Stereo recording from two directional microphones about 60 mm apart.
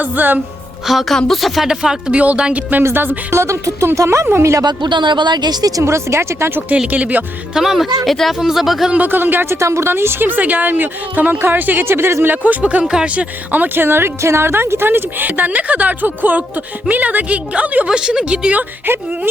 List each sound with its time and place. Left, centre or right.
0.0 s a woman's voice: right
0.9 s speech: centre
1.6 s a woman's voice: centre; by 3.3 s right
3.3 s speech: right
5.8 s speech: right
6.9 s speech: right
7.5 s speech: centre
8.9 s a woman's voice: right
9.6 s a woman's voice: right
12.5 s speech: right
12.8 s speech: centre
13.5 s a woman's voice: right
17.8 s speech: centre
18.9 s a woman's voice: right